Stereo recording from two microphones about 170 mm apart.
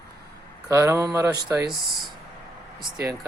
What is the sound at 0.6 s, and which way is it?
Speech, 15° right (ahead or behind).